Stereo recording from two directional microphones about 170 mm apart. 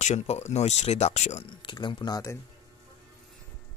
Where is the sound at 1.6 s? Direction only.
30° left (ahead or behind).